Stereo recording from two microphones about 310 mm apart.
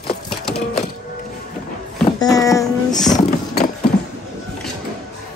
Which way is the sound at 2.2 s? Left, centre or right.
Centre.